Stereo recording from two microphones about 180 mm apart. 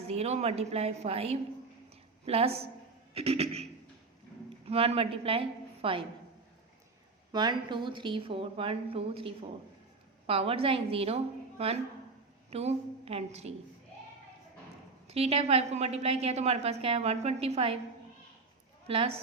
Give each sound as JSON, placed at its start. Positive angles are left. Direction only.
{"t": 0.1, "sound": "a woman's voice", "side_deg": -35}
{"t": 7.3, "sound": "a woman's voice", "side_deg": -25}
{"t": 15.0, "sound": "a woman's voice", "side_deg": -35}
{"t": 18.9, "sound": "a woman's voice", "side_deg": -30}